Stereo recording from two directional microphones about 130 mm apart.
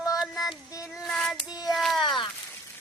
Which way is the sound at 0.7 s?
25° left (ahead or behind).